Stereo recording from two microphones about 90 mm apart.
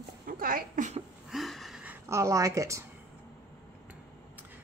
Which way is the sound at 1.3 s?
Centre (ahead or behind).